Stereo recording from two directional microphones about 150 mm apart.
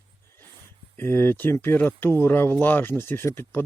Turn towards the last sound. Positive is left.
turn(degrees=15)  # may be behind; listen again after turning